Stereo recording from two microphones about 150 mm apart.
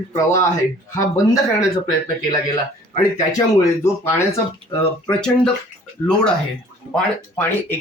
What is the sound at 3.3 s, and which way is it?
Speech, 20° left (ahead or behind).